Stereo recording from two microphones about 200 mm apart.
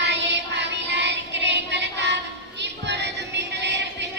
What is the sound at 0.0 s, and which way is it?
Child singing, 60° right (ahead or behind).